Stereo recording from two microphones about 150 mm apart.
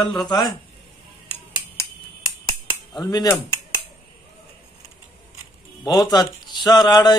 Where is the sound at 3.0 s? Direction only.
25° left (ahead or behind).